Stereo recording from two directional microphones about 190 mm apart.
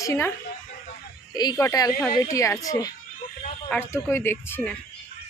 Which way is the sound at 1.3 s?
20° left (ahead or behind).